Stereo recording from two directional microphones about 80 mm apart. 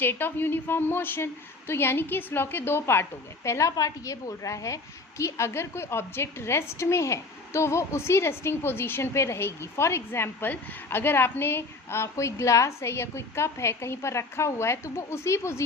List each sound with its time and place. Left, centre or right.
0.0 s a woman's voice: left
3.7 s a woman's voice: left